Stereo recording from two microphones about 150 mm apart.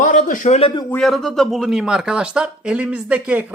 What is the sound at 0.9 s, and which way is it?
Speech, 5° left (ahead or behind).